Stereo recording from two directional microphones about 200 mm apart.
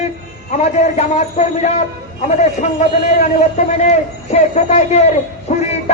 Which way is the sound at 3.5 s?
35° left (ahead or behind).